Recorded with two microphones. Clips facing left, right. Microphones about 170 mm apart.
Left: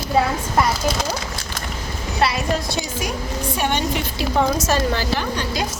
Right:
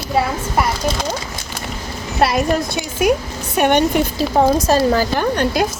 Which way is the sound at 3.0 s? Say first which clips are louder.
Right 7 dB; 60° right (ahead or behind).